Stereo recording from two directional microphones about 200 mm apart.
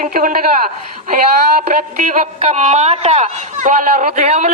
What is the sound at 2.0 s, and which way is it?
Speech, 35° right (ahead or behind).